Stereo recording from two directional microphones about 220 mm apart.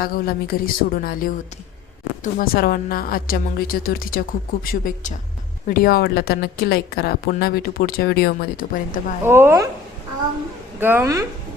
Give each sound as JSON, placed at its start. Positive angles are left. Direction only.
{"t": 0.0, "sound": "a woman's voice", "side_deg": 45}
{"t": 9.2, "sound": "speech", "side_deg": -10}
{"t": 10.8, "sound": "speech", "side_deg": -10}